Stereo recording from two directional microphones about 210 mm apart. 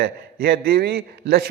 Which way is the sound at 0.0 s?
45° right (ahead or behind).